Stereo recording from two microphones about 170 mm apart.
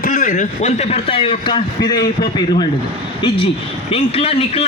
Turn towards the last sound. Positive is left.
turn(degrees=35)  # may be behind; listen again after turning